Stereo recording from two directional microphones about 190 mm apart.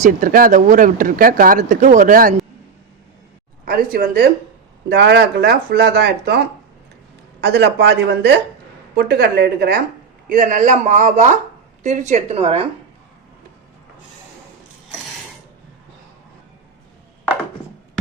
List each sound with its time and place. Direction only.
0.0 s speech: 45° right (ahead or behind)
3.7 s speech: 50° right (ahead or behind)
10.2 s speech: 45° right (ahead or behind)